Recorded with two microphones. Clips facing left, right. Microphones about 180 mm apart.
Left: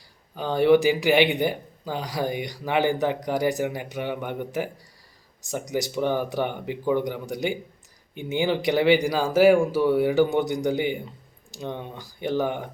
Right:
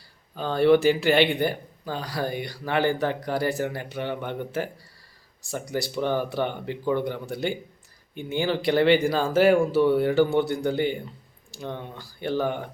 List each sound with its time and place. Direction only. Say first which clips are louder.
0.3 s speech: left 1 dB; 15° left (ahead or behind)